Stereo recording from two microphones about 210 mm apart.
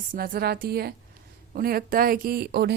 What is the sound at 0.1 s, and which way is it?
Speech, 45° right (ahead or behind).